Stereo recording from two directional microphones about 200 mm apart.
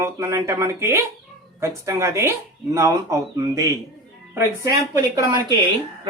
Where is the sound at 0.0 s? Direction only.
15° right (ahead or behind).